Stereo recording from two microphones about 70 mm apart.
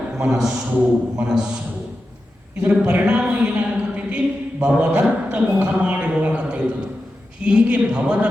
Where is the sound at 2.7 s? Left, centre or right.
Centre.